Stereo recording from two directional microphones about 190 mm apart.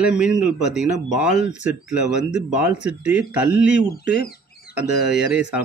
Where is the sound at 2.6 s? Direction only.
5° right (ahead or behind).